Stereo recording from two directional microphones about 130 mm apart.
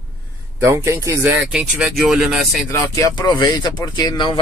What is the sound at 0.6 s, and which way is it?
Speech, 20° right (ahead or behind).